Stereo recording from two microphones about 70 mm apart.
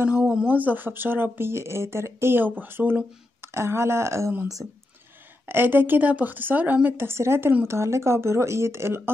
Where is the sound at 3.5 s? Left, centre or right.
Right.